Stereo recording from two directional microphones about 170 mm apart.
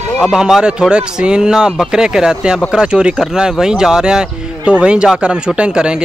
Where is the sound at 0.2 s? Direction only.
Centre (ahead or behind).